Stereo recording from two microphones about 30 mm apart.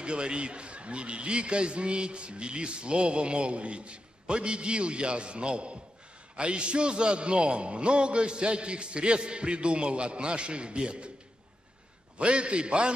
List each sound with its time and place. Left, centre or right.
0.0 s a man's voice: right
12.2 s a man's voice: right